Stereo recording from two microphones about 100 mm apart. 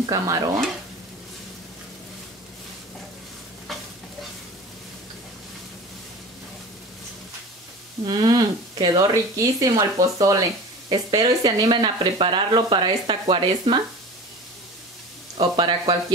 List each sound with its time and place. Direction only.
0.0 s speech: 40° right (ahead or behind)
8.0 s speech: 50° right (ahead or behind)
9.1 s speech: 35° right (ahead or behind); by 13.7 s 55° right (ahead or behind)
15.3 s speech: 50° right (ahead or behind)